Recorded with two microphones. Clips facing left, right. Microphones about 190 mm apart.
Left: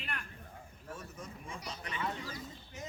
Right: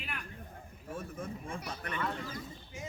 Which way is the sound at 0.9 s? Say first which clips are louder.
Right 10 dB; 55° right (ahead or behind).